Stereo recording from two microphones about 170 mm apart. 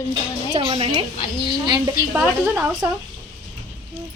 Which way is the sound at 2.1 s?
10° right (ahead or behind).